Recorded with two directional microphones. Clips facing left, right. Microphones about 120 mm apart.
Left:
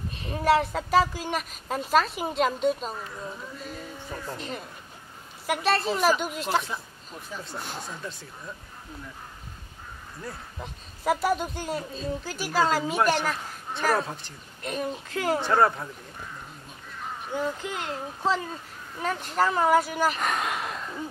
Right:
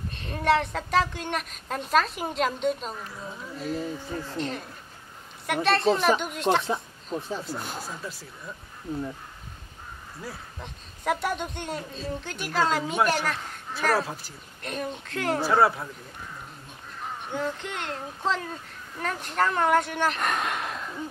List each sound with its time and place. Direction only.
0.1 s a man's voice: 5° left (ahead or behind)
6.6 s speech: 30° right (ahead or behind)
7.4 s a man's voice: centre (ahead or behind)
10.2 s a man's voice: centre (ahead or behind)
17.3 s a man's voice: 5° left (ahead or behind)